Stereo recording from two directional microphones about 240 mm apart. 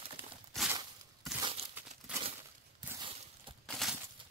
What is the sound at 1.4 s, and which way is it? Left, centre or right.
Crumpling, right.